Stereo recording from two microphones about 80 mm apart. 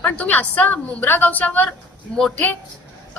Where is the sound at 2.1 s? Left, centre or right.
Centre.